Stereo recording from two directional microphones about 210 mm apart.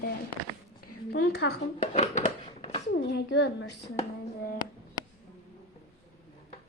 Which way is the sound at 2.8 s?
55° left (ahead or behind).